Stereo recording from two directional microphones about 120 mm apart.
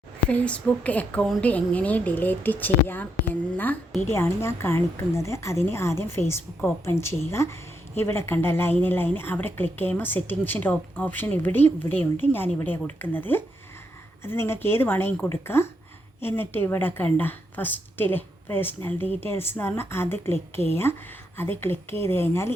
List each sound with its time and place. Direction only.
0.3 s a woman's voice: 10° left (ahead or behind)